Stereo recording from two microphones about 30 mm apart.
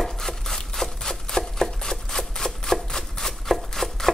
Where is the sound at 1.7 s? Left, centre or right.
Centre.